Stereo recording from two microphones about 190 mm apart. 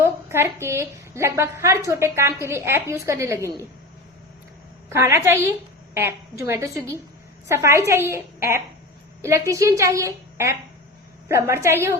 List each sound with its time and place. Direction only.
0.0 s a woman's voice: 15° right (ahead or behind)
4.9 s a woman's voice: 15° right (ahead or behind)